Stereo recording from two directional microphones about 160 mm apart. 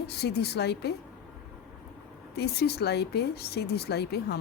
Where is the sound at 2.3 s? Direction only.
90° left.